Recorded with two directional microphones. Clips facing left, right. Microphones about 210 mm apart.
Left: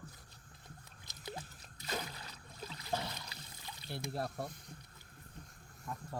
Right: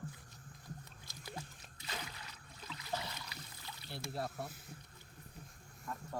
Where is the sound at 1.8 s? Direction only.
40° left (ahead or behind).